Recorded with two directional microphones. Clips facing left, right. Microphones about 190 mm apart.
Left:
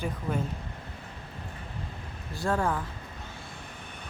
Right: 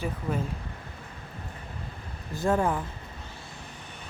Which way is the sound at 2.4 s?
20° right (ahead or behind).